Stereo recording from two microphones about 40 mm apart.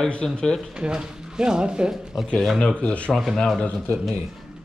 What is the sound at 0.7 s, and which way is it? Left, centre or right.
Speech, right.